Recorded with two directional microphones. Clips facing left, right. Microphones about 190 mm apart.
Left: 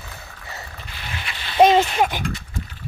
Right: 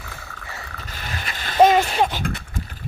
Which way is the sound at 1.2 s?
45° right (ahead or behind).